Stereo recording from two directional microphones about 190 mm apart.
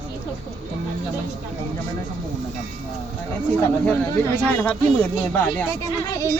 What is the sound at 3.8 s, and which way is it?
Speech, 10° left (ahead or behind).